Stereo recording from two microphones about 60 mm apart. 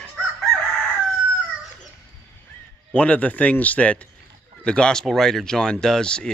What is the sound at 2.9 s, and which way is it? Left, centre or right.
A man's voice, left.